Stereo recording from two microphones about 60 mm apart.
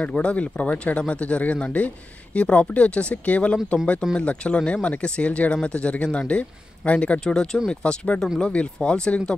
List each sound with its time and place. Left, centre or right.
0.1 s speech: centre